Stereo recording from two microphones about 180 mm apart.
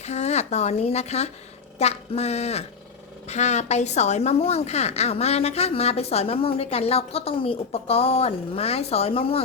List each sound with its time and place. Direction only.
0.0 s a woman's voice: 40° left (ahead or behind)